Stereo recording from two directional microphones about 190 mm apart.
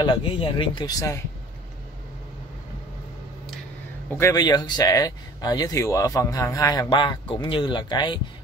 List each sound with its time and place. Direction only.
0.0 s speech: 25° left (ahead or behind)
4.2 s speech: 20° left (ahead or behind)